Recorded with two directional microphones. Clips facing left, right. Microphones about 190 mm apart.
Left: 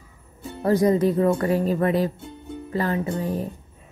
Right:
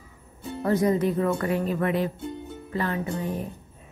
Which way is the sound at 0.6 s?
35° left (ahead or behind).